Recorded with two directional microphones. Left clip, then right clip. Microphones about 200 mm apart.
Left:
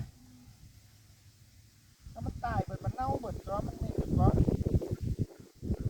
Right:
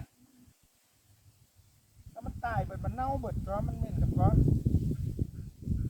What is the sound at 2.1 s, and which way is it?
Speech, 15° right (ahead or behind).